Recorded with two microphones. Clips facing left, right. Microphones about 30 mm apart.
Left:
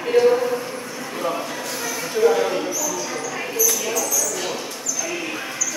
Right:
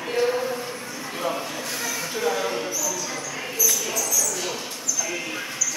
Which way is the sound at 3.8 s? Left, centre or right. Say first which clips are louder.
Left 3 dB; centre.